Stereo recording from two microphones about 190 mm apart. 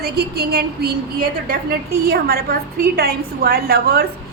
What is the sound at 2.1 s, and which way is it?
A woman's voice, 55° right (ahead or behind).